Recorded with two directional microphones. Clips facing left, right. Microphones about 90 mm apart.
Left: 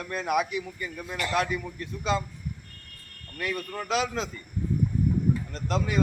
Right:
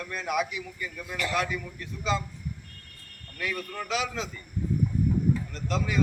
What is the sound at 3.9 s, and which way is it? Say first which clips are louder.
Speech: left 4 dB; 40° left (ahead or behind).